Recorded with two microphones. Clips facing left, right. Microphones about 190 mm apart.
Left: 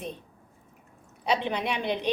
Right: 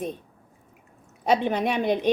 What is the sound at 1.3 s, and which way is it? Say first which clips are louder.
Speech: right 5 dB; 45° right (ahead or behind).